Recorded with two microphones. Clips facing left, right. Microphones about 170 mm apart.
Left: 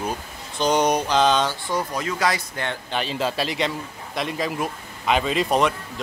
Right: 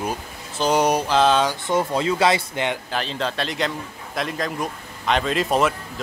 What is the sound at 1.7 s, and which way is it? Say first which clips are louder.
Speech: right 5 dB; 25° right (ahead or behind).